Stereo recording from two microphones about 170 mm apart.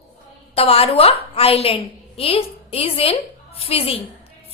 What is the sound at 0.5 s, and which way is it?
A woman's voice, 35° left (ahead or behind).